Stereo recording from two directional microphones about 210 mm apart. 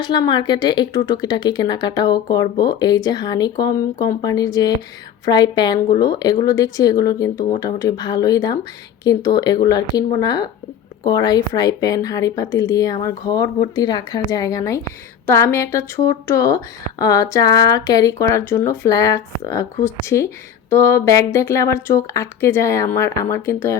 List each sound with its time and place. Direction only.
0.0 s a woman's voice: 20° left (ahead or behind)